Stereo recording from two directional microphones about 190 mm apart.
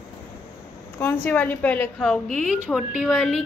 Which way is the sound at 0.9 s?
10° left (ahead or behind).